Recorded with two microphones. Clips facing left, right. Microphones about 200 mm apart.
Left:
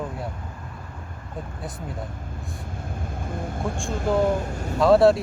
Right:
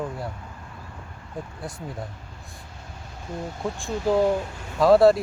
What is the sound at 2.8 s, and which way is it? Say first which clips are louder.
Vehicle: left 4 dB; 50° left (ahead or behind).